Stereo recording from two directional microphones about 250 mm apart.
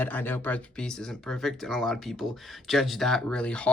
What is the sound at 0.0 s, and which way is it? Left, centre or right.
Speech, centre.